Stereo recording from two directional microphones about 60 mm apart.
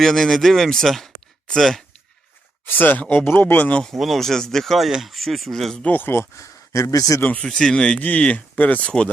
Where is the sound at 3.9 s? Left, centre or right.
Centre.